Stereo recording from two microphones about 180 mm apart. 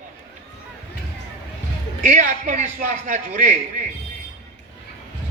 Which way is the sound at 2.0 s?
45° right (ahead or behind).